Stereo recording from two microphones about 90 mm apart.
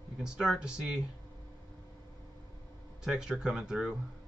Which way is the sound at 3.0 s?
5° right (ahead or behind).